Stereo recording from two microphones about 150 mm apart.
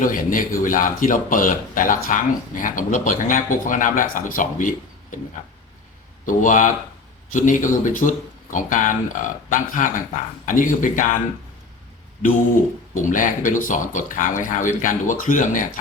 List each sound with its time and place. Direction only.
0.0 s speech: 65° left (ahead or behind)
6.2 s speech: 60° left (ahead or behind)
12.9 s speech: 60° left (ahead or behind)